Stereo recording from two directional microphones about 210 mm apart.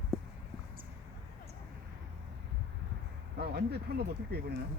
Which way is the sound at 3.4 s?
50° right (ahead or behind).